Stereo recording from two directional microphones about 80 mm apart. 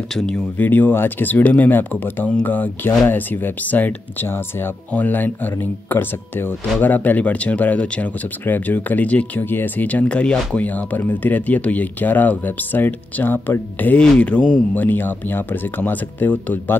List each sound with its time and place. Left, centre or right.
0.6 s speech: left